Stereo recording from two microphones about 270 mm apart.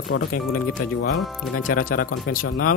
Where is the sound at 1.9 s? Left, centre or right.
Left.